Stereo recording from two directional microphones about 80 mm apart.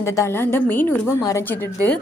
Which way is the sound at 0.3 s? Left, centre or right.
Left.